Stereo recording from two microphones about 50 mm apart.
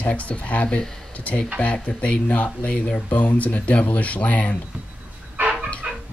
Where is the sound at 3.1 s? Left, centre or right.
Left.